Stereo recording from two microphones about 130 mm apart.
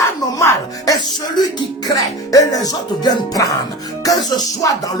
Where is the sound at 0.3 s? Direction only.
25° left (ahead or behind).